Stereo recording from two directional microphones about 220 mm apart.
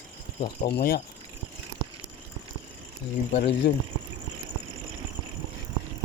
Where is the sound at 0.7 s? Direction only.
45° left (ahead or behind).